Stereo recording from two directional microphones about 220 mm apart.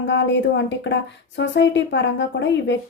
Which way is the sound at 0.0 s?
55° left (ahead or behind).